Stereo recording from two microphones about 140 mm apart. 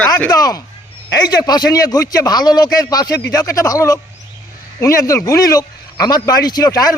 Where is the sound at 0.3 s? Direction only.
25° left (ahead or behind).